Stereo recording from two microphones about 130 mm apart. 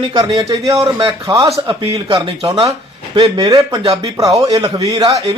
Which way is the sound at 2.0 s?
40° right (ahead or behind).